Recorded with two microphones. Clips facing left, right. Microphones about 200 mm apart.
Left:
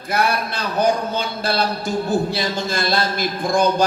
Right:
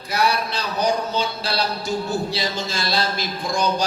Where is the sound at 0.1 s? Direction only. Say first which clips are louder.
Left 1 dB; 55° left (ahead or behind).